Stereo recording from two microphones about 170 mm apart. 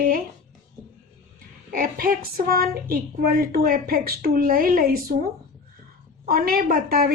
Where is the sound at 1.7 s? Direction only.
55° right (ahead or behind).